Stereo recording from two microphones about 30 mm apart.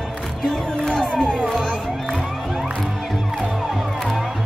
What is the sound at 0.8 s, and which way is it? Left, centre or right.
Music, left.